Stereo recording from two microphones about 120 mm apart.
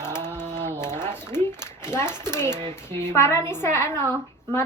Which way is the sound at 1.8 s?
20° left (ahead or behind).